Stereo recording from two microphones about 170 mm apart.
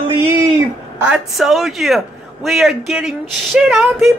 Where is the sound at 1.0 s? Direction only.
5° right (ahead or behind).